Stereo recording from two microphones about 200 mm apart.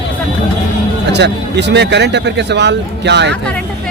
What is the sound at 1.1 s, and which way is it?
Speech, 60° right (ahead or behind).